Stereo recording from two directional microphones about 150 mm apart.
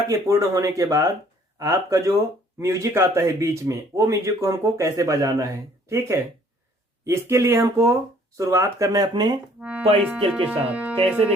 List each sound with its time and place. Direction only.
0.1 s speech: 20° right (ahead or behind)
9.6 s speech: 10° right (ahead or behind)